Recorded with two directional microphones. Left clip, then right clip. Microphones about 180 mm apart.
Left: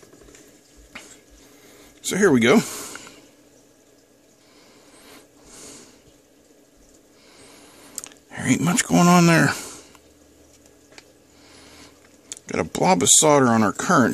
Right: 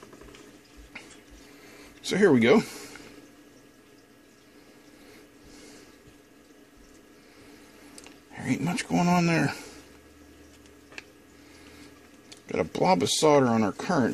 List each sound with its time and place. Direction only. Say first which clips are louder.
0.9 s a sound: left 4 dB; 35° left (ahead or behind)
2.0 s speech: left 3 dB; 25° left (ahead or behind)
7.9 s speech: left 9 dB; 40° left (ahead or behind)
12.3 s speech: left 3 dB; 35° left (ahead or behind)